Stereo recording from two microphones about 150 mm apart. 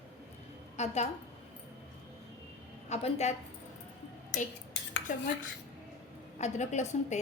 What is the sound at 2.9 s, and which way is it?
Speech, 45° left (ahead or behind).